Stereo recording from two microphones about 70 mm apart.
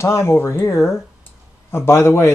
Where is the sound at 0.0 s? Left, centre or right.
Left.